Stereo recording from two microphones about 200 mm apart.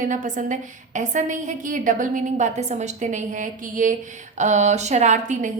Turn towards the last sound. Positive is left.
turn(degrees=-40)  # may be behind; listen again after turning